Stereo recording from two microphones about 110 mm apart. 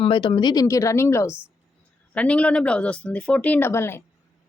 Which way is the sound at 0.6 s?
30° left (ahead or behind).